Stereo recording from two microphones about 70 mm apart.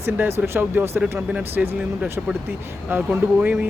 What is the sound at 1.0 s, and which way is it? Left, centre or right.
Speech, centre.